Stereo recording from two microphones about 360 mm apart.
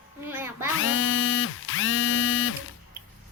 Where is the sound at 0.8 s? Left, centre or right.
Left.